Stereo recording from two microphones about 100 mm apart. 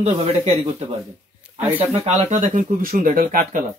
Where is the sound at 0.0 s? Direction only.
90° right.